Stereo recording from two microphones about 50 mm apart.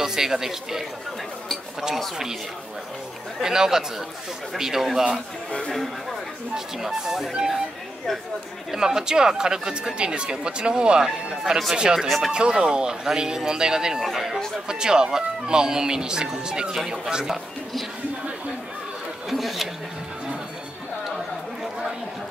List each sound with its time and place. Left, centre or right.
0.0 s speech: centre
3.4 s speech: centre
5.7 s speech: centre
6.5 s speech: centre
8.7 s speech: centre
14.7 s speech: centre
19.2 s speech: centre